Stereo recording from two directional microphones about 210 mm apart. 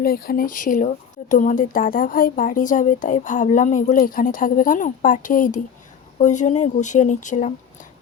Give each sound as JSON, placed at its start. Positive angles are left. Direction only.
{"t": 0.0, "sound": "speech", "side_deg": 45}